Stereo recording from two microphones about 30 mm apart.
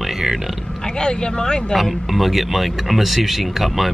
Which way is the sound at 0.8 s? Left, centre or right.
Left.